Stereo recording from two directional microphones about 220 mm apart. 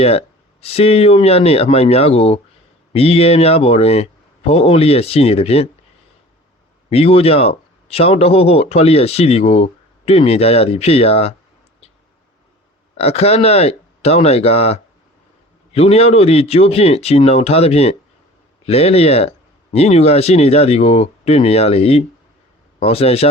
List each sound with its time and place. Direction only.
0.0 s speech: 25° left (ahead or behind)
6.9 s speech: 25° left (ahead or behind)
13.0 s speech: 30° left (ahead or behind)